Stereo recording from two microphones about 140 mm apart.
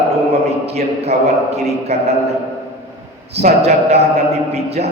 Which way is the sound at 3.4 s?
50° right (ahead or behind).